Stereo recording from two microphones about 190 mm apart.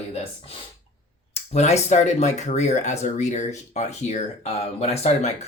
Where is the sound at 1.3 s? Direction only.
35° left (ahead or behind).